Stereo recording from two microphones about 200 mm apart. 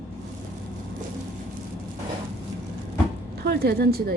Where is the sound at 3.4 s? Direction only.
50° right (ahead or behind).